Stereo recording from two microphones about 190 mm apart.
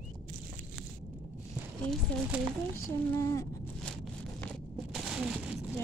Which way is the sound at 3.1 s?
15° left (ahead or behind).